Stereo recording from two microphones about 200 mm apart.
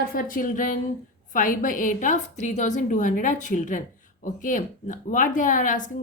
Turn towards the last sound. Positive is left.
turn(degrees=40)  # may be behind; listen again after turning